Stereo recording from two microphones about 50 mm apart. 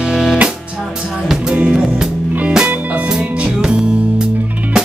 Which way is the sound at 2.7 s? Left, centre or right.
Right.